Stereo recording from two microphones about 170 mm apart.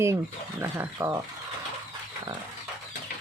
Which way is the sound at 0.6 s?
15° right (ahead or behind).